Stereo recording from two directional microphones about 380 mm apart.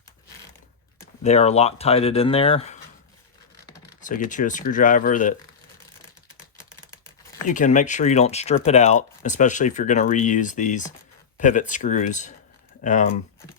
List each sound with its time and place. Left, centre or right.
0.9 s speech: centre
4.0 s speech: left
6.9 s typing: centre
7.4 s speech: centre